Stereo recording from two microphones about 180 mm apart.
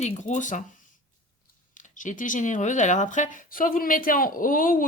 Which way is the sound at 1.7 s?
45° left (ahead or behind).